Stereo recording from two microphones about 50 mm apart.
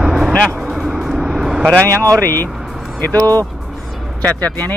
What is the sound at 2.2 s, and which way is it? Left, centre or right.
Speech, left.